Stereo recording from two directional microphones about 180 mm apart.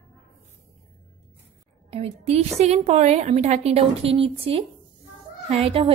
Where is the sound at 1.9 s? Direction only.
35° right (ahead or behind).